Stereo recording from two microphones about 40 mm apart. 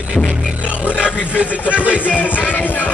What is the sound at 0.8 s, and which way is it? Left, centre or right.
Music, right.